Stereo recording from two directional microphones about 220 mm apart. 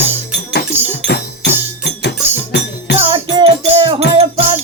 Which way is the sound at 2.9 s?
25° right (ahead or behind).